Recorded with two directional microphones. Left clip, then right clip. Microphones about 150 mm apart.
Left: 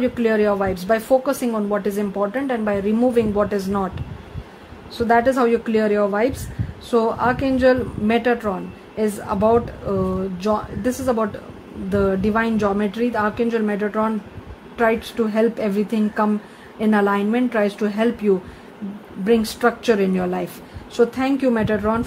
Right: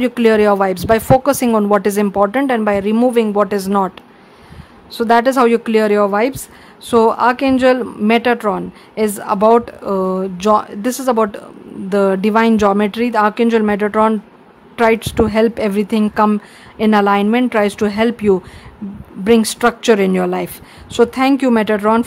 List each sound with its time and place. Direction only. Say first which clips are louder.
0.0 s a woman's voice: right 6 dB; 40° right (ahead or behind)
4.9 s a woman's voice: right 5 dB; 35° right (ahead or behind)